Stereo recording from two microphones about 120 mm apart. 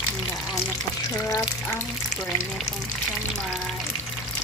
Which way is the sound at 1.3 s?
20° left (ahead or behind).